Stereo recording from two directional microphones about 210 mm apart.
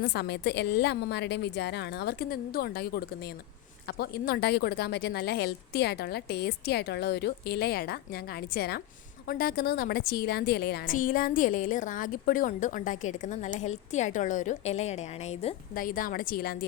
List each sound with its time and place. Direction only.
0.0 s a woman's voice: 50° left (ahead or behind); by 15.5 s 30° left (ahead or behind)
15.7 s speech: 40° left (ahead or behind)